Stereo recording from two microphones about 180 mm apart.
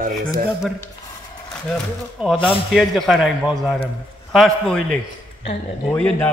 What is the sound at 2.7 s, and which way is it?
Speech, centre (ahead or behind).